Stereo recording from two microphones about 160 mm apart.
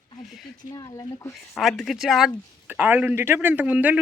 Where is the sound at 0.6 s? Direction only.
25° left (ahead or behind).